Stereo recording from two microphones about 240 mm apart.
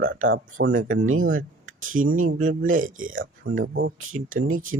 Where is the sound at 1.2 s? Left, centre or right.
Right.